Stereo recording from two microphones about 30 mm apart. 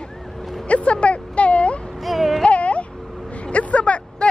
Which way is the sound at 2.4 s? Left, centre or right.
Left.